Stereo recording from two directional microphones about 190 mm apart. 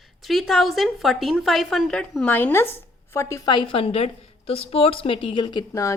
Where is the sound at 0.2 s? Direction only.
Centre (ahead or behind).